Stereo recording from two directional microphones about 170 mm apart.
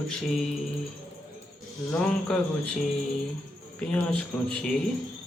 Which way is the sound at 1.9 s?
5° left (ahead or behind).